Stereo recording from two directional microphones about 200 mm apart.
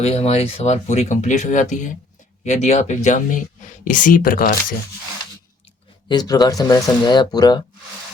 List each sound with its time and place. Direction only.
0.0 s speech: 30° left (ahead or behind)
6.1 s speech: 20° left (ahead or behind)